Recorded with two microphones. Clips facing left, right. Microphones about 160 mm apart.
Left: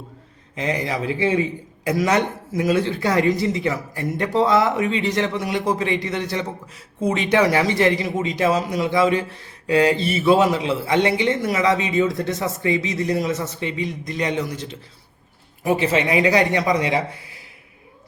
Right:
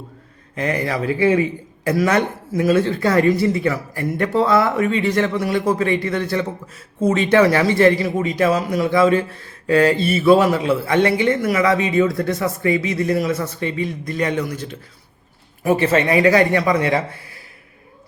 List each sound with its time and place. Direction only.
0.5 s a man's voice: 15° left (ahead or behind)
15.6 s a man's voice: 15° left (ahead or behind)